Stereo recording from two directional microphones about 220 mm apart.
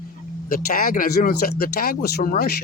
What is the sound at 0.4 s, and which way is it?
Speech, 40° left (ahead or behind).